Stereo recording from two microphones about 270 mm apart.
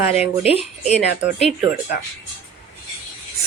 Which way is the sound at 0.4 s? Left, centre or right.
Left.